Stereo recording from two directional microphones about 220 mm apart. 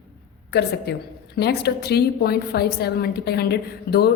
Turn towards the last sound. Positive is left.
turn(degrees=45)  # may be behind; listen again after turning